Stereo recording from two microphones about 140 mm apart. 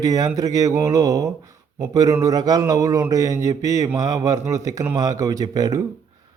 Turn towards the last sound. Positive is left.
turn(degrees=-25)  # may be behind; listen again after turning